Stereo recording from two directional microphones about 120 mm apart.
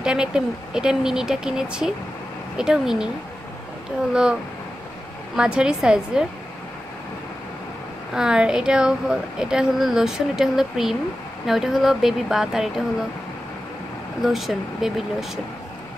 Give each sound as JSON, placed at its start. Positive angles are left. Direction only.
{"t": 0.0, "sound": "a woman's voice", "side_deg": -5}
{"t": 4.1, "sound": "a woman's voice", "side_deg": -5}
{"t": 8.1, "sound": "a woman's voice", "side_deg": -5}
{"t": 14.2, "sound": "a woman's voice", "side_deg": 0}